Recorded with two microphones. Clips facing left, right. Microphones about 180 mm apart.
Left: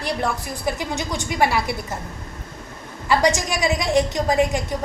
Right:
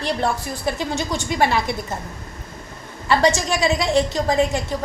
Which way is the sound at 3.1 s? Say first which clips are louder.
Right 1 dB; 15° left (ahead or behind).